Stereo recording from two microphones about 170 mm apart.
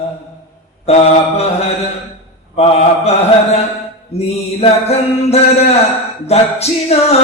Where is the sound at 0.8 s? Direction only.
35° left (ahead or behind).